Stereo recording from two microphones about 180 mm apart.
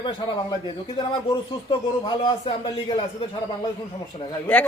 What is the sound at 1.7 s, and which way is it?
Speech, 30° left (ahead or behind).